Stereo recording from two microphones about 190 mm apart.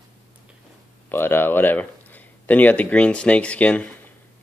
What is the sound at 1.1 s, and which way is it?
Speech, 10° left (ahead or behind).